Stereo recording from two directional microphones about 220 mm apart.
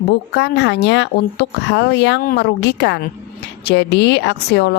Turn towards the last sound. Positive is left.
turn(degrees=50)  # may be behind; listen again after turning